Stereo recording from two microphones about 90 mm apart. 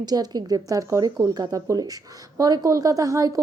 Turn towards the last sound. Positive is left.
turn(degrees=-40)  # may be behind; listen again after turning